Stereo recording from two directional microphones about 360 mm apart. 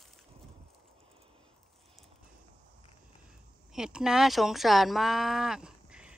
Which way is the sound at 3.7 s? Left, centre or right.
Centre.